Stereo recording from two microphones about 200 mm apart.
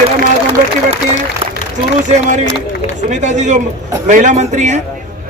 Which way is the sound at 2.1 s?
35° right (ahead or behind).